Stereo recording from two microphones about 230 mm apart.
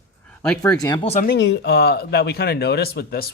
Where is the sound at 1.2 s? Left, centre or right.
Left.